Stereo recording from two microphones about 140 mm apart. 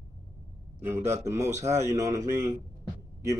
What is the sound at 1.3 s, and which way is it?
Speech, 25° right (ahead or behind).